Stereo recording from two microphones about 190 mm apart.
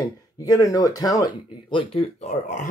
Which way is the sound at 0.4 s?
20° left (ahead or behind).